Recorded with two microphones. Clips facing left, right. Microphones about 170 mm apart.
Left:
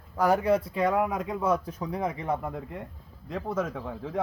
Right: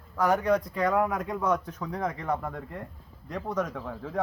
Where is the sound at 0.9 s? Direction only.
20° left (ahead or behind).